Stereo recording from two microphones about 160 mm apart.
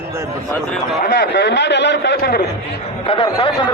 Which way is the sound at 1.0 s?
80° left.